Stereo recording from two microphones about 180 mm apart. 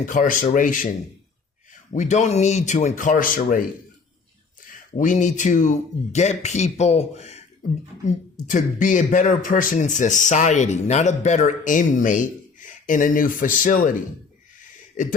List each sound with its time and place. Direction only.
0.0 s speech: 45° left (ahead or behind)
4.6 s speech: 45° left (ahead or behind)
15.0 s speech: 45° left (ahead or behind)